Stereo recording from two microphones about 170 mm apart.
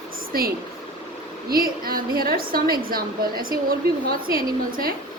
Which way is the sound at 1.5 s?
60° right (ahead or behind).